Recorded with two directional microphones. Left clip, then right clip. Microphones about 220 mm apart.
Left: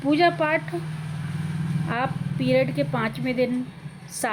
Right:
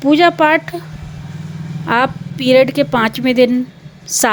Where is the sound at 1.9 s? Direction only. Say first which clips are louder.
Right 13 dB; 50° right (ahead or behind).